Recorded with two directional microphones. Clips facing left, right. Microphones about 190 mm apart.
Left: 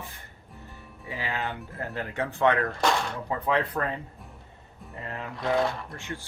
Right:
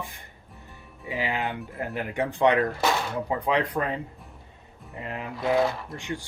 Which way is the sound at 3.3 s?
15° right (ahead or behind).